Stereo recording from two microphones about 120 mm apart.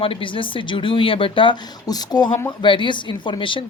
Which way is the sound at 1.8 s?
35° left (ahead or behind).